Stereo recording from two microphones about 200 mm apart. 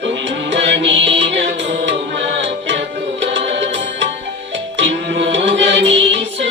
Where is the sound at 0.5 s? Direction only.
65° right (ahead or behind).